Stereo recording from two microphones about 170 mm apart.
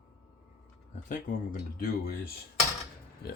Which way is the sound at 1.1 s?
55° left (ahead or behind).